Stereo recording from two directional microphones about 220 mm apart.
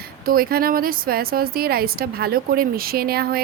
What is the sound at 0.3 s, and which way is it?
A woman's voice, 45° right (ahead or behind).